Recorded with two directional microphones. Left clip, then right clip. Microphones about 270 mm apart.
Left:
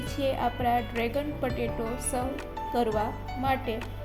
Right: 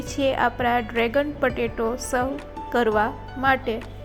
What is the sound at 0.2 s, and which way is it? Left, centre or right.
Music, centre.